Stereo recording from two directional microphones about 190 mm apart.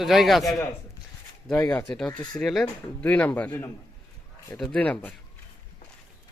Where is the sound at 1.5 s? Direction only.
15° left (ahead or behind).